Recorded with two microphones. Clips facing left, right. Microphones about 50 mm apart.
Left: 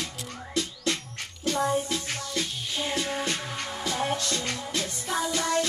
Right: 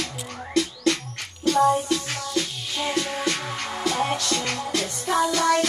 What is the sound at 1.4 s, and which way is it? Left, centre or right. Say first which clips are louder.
Music: right 7 dB; right.